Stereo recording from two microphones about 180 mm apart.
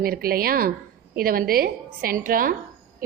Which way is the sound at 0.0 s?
55° right (ahead or behind).